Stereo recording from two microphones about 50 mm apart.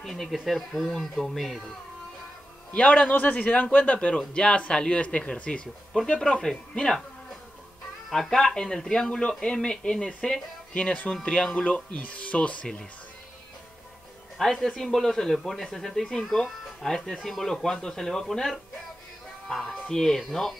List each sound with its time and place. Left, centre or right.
0.0 s speech: centre
2.7 s a man's voice: left
4.3 s a man's voice: centre
8.1 s speech: centre
10.8 s a man's voice: left
14.4 s speech: centre